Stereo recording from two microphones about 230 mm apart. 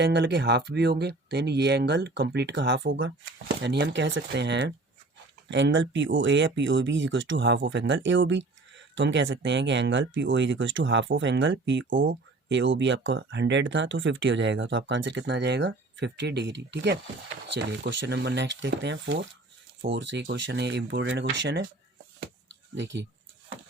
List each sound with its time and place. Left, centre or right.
0.0 s speech: right
22.7 s speech: right